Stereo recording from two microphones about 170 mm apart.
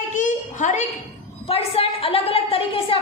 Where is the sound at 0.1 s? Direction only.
50° left (ahead or behind).